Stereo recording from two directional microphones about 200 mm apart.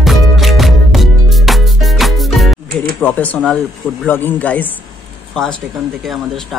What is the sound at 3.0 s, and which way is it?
Speech, 10° left (ahead or behind).